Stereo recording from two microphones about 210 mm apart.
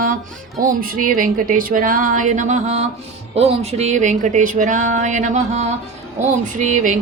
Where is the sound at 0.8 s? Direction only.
40° right (ahead or behind).